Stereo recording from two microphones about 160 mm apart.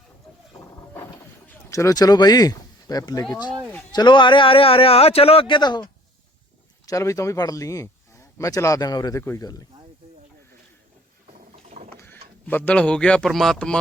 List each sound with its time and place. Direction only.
1.5 s speech: 20° left (ahead or behind)
11.9 s speech: 10° left (ahead or behind)